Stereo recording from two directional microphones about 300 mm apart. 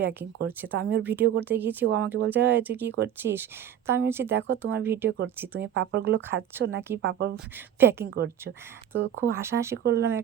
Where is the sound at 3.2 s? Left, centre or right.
Right.